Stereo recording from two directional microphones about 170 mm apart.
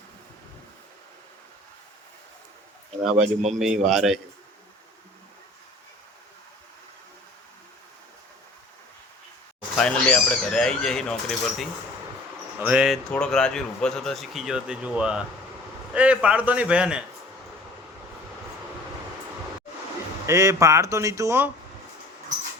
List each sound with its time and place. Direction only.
3.0 s speech: 40° right (ahead or behind)
3.5 s speech: centre (ahead or behind)
9.7 s speech: 5° left (ahead or behind)
13.1 s speech: 5° left (ahead or behind)
20.2 s speech: 20° right (ahead or behind)